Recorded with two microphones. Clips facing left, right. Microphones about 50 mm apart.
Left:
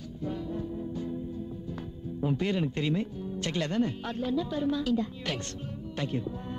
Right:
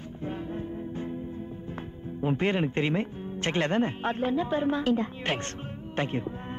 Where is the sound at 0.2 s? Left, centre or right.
Right.